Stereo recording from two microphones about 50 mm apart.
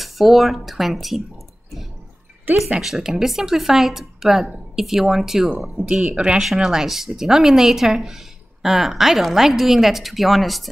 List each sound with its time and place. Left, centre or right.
0.0 s speech: centre
2.8 s speech: centre
5.9 s speech: centre
6.4 s speech: centre